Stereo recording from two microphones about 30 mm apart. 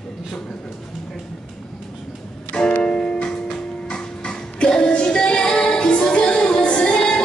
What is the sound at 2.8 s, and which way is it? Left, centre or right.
Music, left.